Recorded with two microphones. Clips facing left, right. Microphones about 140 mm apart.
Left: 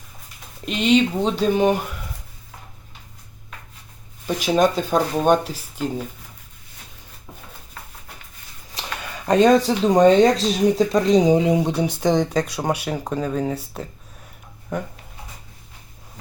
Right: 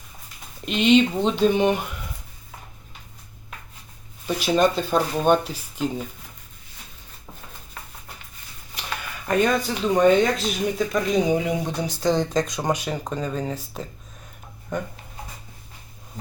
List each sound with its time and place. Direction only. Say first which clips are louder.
0.6 s speech: even; centre (ahead or behind)
4.4 s speech: left 2 dB; 10° left (ahead or behind)
9.2 s speech: left 7 dB; 35° left (ahead or behind)
11.3 s a sound: left 6 dB; 25° left (ahead or behind)
11.8 s speech: left 3 dB; 20° left (ahead or behind)